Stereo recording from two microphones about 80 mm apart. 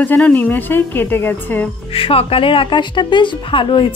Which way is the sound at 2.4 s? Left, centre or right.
Left.